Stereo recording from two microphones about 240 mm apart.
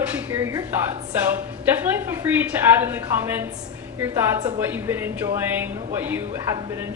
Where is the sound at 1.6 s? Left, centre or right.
Centre.